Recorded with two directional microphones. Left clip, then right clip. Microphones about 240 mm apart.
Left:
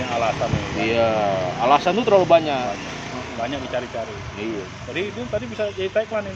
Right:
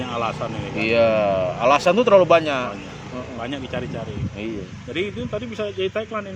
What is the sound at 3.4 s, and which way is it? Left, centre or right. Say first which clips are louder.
Speech: left 4 dB; right.